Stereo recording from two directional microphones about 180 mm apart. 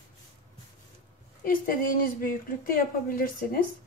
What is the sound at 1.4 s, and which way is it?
A woman's voice, 50° left (ahead or behind).